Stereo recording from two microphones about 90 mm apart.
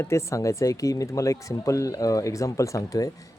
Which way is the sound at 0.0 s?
30° left (ahead or behind).